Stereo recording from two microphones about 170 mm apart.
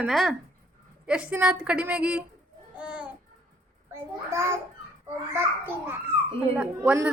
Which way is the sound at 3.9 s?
15° right (ahead or behind).